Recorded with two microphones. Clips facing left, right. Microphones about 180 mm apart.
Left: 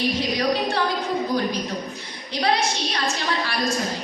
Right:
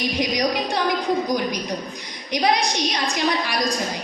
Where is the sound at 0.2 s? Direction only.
15° right (ahead or behind).